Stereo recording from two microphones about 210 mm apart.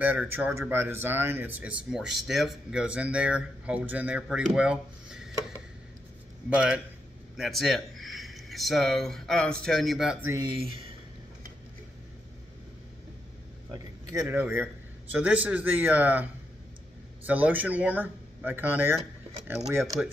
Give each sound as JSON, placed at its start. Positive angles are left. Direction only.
{"t": 0.0, "sound": "speech", "side_deg": -10}
{"t": 7.3, "sound": "speech", "side_deg": 0}
{"t": 14.1, "sound": "speech", "side_deg": -10}
{"t": 17.3, "sound": "speech", "side_deg": -10}